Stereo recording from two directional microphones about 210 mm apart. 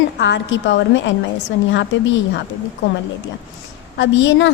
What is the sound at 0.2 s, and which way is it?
A woman's voice, 60° left (ahead or behind).